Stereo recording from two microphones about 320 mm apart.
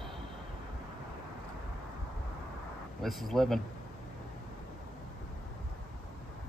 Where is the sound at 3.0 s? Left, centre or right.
Centre.